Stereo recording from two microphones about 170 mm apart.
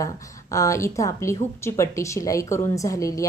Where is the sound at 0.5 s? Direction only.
20° left (ahead or behind).